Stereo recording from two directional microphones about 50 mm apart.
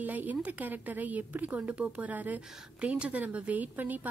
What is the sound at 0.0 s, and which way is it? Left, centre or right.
Speech, right.